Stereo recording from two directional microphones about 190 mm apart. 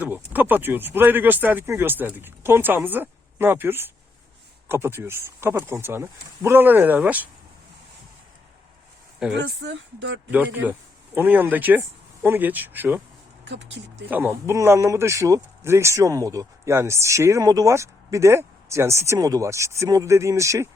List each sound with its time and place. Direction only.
0.0 s speech: 10° right (ahead or behind)
9.3 s speech: 70° right (ahead or behind)
10.3 s speech: 10° right (ahead or behind)
13.4 s speech: 70° right (ahead or behind)
14.1 s speech: 10° right (ahead or behind)